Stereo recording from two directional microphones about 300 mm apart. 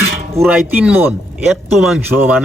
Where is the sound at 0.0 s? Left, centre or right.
Centre.